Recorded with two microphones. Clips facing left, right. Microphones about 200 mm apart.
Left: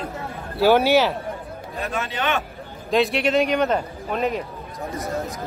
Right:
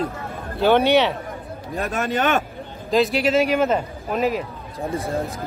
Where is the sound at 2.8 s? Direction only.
Centre (ahead or behind).